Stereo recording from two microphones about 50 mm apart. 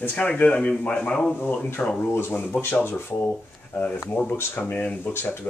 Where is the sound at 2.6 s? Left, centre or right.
Left.